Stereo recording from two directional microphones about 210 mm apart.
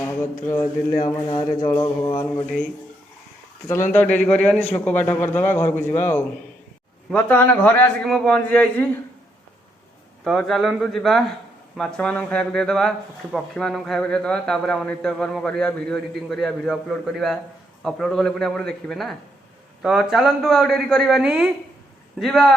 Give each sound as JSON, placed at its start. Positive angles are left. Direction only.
{"t": 0.0, "sound": "mantra", "side_deg": 10}
{"t": 0.4, "sound": "a man's voice", "side_deg": 15}
{"t": 3.9, "sound": "a man's voice", "side_deg": 5}
{"t": 10.2, "sound": "a man's voice", "side_deg": 0}